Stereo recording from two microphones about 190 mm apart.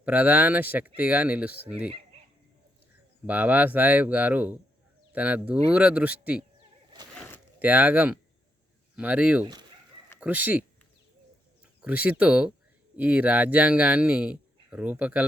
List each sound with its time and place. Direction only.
0.0 s speech: 10° right (ahead or behind)
3.2 s speech: 10° right (ahead or behind)
7.6 s speech: 10° right (ahead or behind)
11.8 s speech: 10° right (ahead or behind)